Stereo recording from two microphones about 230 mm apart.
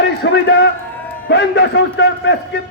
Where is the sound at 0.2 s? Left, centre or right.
Left.